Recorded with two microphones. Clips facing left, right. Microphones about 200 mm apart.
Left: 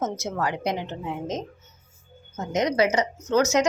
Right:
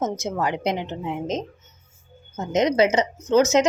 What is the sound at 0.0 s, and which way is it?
A woman's voice, 20° right (ahead or behind).